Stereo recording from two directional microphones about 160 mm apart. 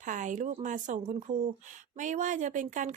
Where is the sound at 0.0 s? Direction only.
50° right (ahead or behind).